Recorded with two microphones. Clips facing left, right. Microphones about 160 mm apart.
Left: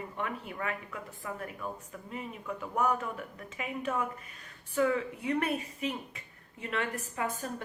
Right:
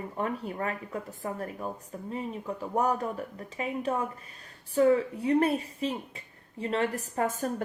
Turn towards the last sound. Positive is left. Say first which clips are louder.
# right 6 dB
turn(degrees=-45)  # may be behind; listen again after turning